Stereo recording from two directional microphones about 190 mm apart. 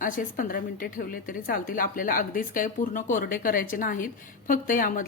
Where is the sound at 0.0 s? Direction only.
45° left (ahead or behind).